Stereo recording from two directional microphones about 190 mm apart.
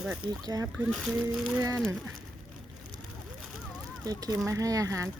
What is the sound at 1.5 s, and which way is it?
Speech, 15° right (ahead or behind).